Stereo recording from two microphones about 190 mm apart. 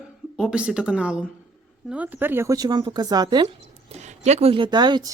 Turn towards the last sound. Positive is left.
turn(degrees=-20)  # may be behind; listen again after turning